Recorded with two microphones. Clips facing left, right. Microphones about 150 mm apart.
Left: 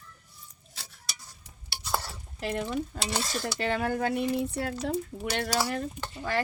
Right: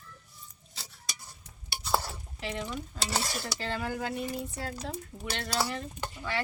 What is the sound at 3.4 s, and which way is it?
Speech, 60° left (ahead or behind).